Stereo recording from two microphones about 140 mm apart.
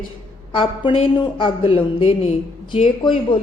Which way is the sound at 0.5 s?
35° left (ahead or behind).